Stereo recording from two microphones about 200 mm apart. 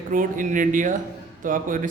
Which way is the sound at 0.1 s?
40° right (ahead or behind).